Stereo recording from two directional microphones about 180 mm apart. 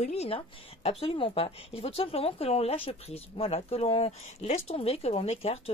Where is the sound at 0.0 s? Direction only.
35° left (ahead or behind).